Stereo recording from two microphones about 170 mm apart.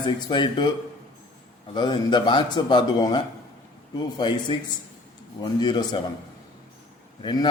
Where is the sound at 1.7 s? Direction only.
25° left (ahead or behind).